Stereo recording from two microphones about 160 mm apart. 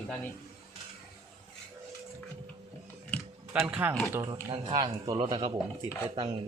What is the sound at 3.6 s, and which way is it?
Speech, 10° right (ahead or behind).